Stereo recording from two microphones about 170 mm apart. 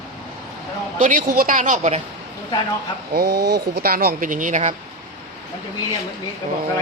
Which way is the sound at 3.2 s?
80° right.